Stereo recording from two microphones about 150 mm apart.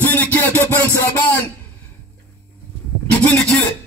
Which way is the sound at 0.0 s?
10° left (ahead or behind).